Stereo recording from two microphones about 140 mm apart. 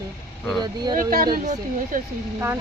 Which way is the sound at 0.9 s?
90° right.